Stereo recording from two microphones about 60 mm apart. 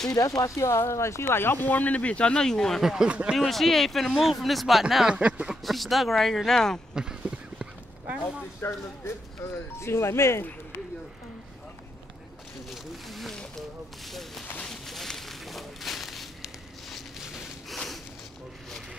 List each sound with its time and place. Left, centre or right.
0.1 s speech: left; by 2.8 s centre
2.8 s speech: centre
3.1 s speech: centre
3.3 s speech: centre
5.1 s speech: right
5.6 s speech: centre
6.9 s a sound: centre
8.5 s speech: left
12.6 s speech: centre
14.7 s a sound: centre